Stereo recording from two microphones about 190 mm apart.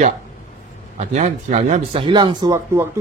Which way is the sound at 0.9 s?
35° right (ahead or behind).